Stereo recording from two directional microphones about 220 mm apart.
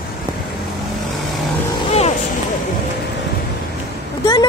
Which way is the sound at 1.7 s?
30° left (ahead or behind).